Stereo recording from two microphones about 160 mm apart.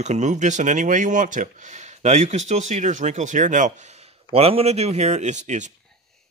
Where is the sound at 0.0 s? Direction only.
45° right (ahead or behind).